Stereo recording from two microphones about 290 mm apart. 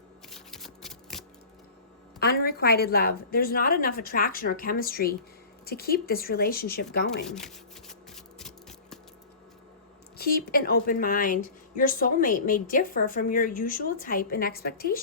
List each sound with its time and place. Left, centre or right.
0.3 s shuffling cards: centre
2.1 s a woman's voice: left
7.3 s shuffling cards: centre
10.2 s a woman's voice: left